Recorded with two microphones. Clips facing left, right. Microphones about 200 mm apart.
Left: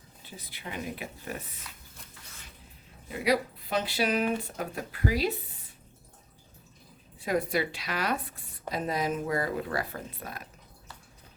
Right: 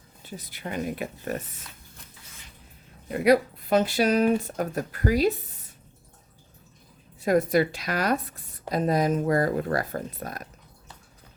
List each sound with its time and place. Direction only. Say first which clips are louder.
0.3 s speech: right 7 dB; 45° right (ahead or behind)
3.1 s speech: right 7 dB; 50° right (ahead or behind)
7.2 s speech: right 7 dB; 45° right (ahead or behind)